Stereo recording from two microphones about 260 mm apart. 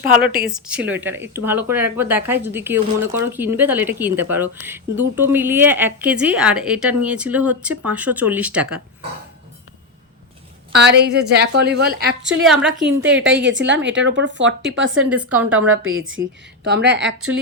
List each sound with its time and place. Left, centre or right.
0.4 s speech: centre
10.8 s a woman's voice: right
12.4 s speech: centre
13.2 s a woman's voice: right
14.9 s speech: centre
15.7 s a woman's voice: right